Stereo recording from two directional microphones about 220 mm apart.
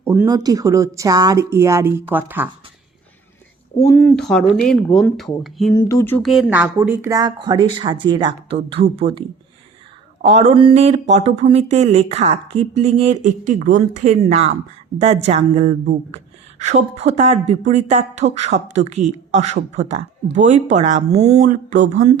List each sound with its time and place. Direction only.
0.0 s speech: 15° right (ahead or behind)
3.8 s speech: 10° left (ahead or behind)
5.7 s a woman's voice: 15° left (ahead or behind); by 22.1 s 30° right (ahead or behind)